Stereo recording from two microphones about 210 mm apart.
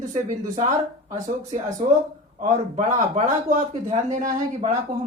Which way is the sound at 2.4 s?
35° right (ahead or behind).